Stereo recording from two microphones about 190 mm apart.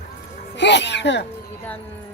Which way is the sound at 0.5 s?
65° left (ahead or behind).